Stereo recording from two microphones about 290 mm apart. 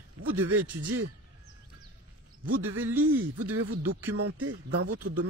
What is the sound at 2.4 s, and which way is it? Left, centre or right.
Speech, right.